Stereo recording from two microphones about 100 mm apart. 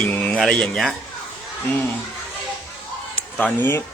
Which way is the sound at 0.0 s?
10° left (ahead or behind).